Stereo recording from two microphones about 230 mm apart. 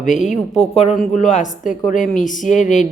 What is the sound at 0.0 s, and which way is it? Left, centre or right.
Speech, left.